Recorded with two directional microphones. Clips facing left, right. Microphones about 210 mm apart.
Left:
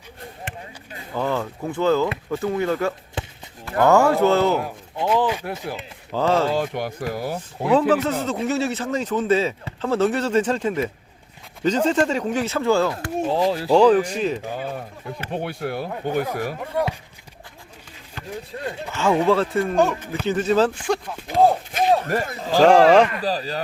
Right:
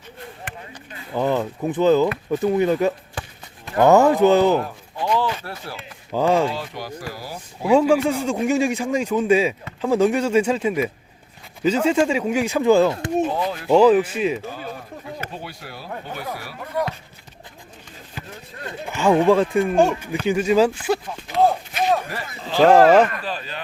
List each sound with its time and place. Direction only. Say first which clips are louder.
1.1 s a man's voice: right 3 dB; 15° right (ahead or behind)
5.0 s speech: left 2 dB; 10° left (ahead or behind)
6.1 s a man's voice: right 1 dB; 15° right (ahead or behind)
6.5 s speech: left 6 dB; 50° left (ahead or behind)
7.7 s a man's voice: right 2 dB; 10° right (ahead or behind)
13.3 s speech: left 4 dB; 30° left (ahead or behind)
13.7 s a man's voice: right 2 dB; 5° right (ahead or behind)
15.3 s speech: left 9 dB; 60° left (ahead or behind)
18.9 s a man's voice: right 3 dB; 15° right (ahead or behind)
22.1 s speech: left 5 dB; 45° left (ahead or behind)
22.6 s speech: right 1 dB; 5° right (ahead or behind)
23.2 s speech: left 6 dB; 35° left (ahead or behind)